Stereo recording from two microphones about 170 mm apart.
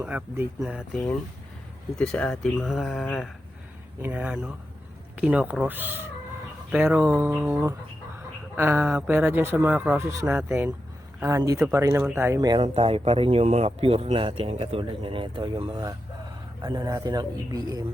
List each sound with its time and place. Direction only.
0.0 s a man's voice: 10° right (ahead or behind)
4.0 s a man's voice: 10° right (ahead or behind)